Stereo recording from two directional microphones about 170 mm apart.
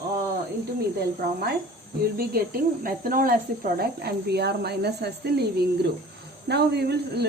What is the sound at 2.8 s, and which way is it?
Speech, 55° right (ahead or behind).